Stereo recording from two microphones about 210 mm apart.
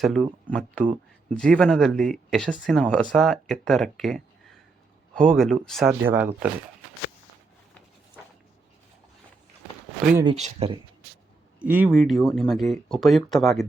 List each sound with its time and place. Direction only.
0.0 s speech: 5° left (ahead or behind)
5.9 s speech: 10° right (ahead or behind)
10.2 s speech: 30° right (ahead or behind)
11.6 s speech: 5° right (ahead or behind)